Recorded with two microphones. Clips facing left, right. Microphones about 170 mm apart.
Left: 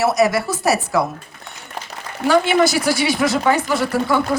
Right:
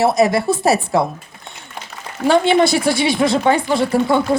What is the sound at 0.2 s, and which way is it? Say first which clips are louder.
Speech: right 2 dB; 25° right (ahead or behind).